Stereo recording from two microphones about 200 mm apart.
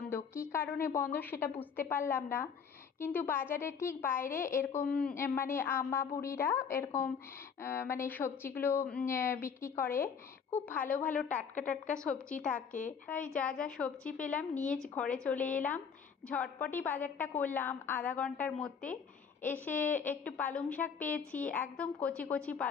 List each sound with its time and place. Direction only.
0.1 s a woman's voice: 10° left (ahead or behind)
11.2 s a woman's voice: 35° left (ahead or behind)
11.9 s a woman's voice: 5° left (ahead or behind)
12.5 s a woman's voice: 40° left (ahead or behind)
13.1 s a woman's voice: 5° left (ahead or behind)